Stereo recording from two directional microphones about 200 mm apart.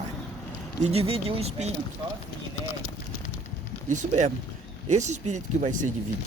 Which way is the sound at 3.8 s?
35° right (ahead or behind).